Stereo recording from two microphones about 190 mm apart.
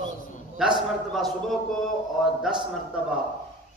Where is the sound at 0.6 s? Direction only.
5° right (ahead or behind).